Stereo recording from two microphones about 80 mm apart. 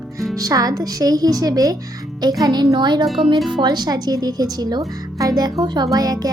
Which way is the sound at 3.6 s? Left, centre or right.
Right.